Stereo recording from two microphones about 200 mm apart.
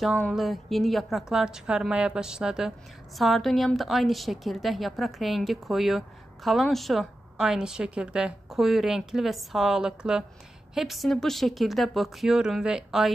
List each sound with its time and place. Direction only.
0.2 s a woman's voice: centre (ahead or behind)